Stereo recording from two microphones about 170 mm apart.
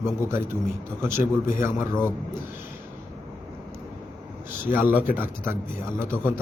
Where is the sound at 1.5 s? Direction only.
15° right (ahead or behind).